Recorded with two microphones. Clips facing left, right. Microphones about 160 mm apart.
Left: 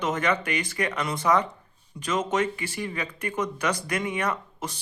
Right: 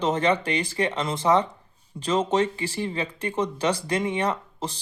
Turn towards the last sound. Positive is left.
turn(degrees=-30)  # may be behind; listen again after turning